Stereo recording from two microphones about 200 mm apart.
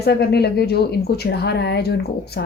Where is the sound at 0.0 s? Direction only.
55° left (ahead or behind).